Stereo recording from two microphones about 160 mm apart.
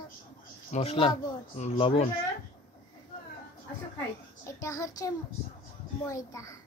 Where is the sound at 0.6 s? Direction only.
40° left (ahead or behind).